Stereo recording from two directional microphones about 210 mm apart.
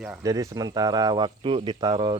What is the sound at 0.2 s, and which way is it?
Speech, 15° right (ahead or behind).